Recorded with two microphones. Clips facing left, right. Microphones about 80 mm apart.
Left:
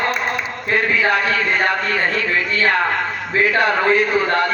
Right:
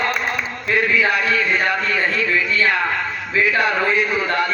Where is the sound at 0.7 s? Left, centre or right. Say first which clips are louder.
Left 1 dB; left.